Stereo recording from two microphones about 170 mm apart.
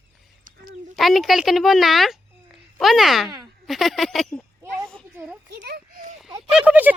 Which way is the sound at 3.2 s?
20° right (ahead or behind).